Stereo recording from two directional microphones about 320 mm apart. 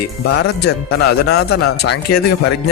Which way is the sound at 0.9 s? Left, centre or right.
Left.